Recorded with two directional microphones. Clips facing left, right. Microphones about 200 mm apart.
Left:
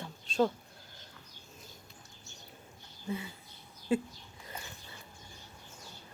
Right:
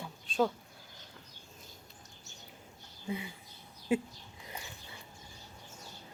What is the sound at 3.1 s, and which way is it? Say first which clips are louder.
Speech: even; 15° right (ahead or behind).